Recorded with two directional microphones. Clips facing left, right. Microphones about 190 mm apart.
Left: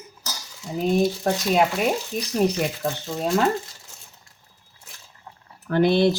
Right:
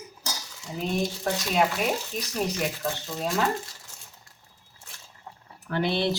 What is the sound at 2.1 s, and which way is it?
Speech, 50° left (ahead or behind).